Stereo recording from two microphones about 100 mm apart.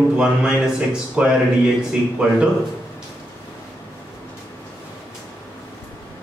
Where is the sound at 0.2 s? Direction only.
10° right (ahead or behind).